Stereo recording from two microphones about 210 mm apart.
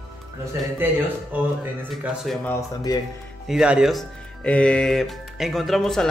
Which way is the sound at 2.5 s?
15° left (ahead or behind).